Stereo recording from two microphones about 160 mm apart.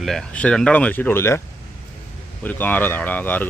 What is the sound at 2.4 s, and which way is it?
Speech, 10° left (ahead or behind).